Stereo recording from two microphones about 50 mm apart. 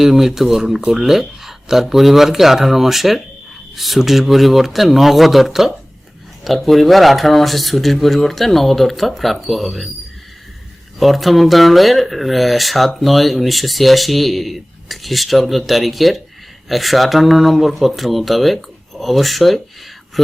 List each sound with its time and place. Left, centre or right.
0.0 s speech: centre
11.0 s speech: centre